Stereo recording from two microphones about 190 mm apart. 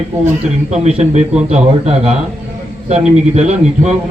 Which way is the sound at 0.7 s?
35° right (ahead or behind).